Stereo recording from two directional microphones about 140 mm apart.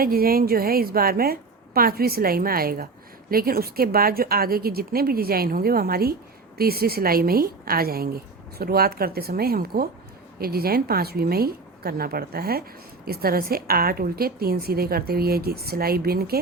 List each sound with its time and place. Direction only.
0.0 s a woman's voice: 90° right